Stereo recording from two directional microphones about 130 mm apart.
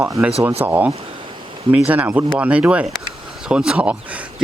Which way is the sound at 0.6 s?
10° right (ahead or behind).